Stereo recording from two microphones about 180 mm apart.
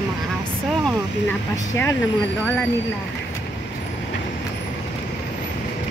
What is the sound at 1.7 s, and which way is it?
Speech, 15° left (ahead or behind).